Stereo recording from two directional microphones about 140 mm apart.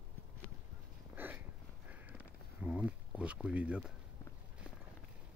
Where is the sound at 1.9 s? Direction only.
10° right (ahead or behind).